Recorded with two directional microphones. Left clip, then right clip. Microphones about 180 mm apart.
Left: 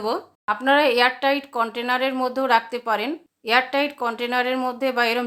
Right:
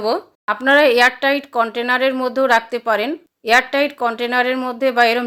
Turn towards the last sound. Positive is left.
turn(degrees=-15)  # may be behind; listen again after turning